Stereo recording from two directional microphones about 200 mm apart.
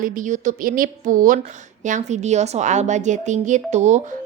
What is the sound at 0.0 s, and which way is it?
A woman's voice, 40° right (ahead or behind).